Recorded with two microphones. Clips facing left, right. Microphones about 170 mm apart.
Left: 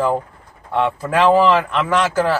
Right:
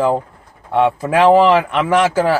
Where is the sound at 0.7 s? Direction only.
15° right (ahead or behind).